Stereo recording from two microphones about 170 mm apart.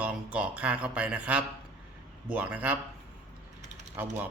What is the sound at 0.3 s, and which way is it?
Speech, 10° right (ahead or behind).